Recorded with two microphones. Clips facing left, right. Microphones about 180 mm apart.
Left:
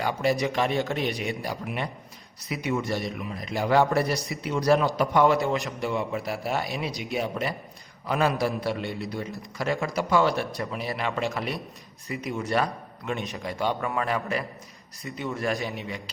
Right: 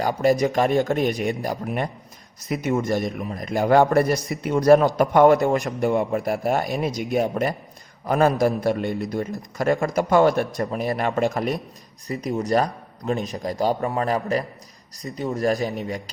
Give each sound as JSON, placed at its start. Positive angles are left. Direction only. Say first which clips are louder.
{"t": 0.0, "sound": "a man's voice", "louder": "right 6 dB", "side_deg": -40}